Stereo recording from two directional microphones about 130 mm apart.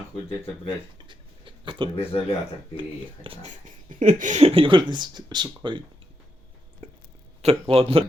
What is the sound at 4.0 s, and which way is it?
Speech, 80° right.